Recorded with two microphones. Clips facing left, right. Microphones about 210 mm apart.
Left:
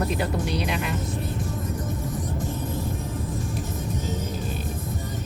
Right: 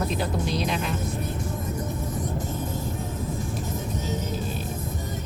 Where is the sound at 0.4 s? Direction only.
60° left (ahead or behind).